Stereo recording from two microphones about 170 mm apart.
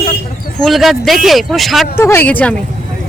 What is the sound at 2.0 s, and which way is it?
Speech, 15° left (ahead or behind).